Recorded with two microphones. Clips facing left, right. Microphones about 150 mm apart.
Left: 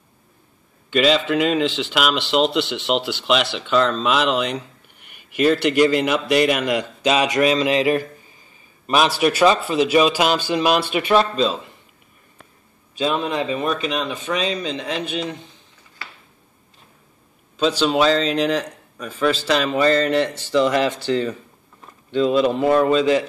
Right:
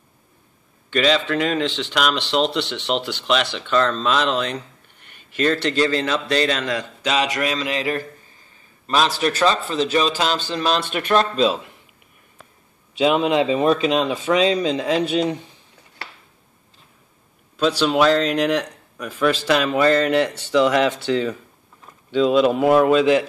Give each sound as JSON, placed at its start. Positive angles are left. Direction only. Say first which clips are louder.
{"t": 0.8, "sound": "a man's voice", "louder": "left 2 dB", "side_deg": 5}
{"t": 13.0, "sound": "speech", "louder": "right 4 dB", "side_deg": -15}
{"t": 17.6, "sound": "speech", "louder": "even", "side_deg": 0}